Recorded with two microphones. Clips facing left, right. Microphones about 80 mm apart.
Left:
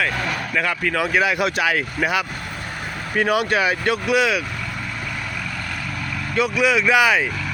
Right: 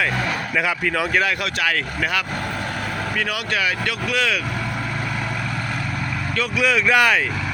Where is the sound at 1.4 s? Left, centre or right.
Centre.